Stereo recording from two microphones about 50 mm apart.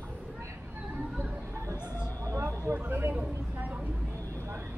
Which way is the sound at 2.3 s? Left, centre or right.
Right.